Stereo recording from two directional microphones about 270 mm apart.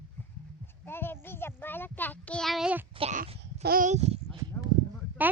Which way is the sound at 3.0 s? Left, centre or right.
Right.